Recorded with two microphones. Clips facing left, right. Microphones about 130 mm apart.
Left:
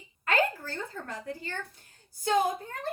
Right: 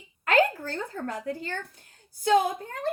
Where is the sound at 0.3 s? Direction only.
50° right (ahead or behind).